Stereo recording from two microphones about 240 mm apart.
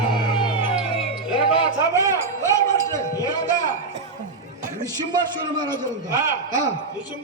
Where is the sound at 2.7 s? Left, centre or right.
Centre.